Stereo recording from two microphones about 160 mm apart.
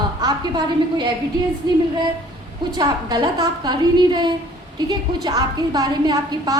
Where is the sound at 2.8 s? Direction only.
25° right (ahead or behind).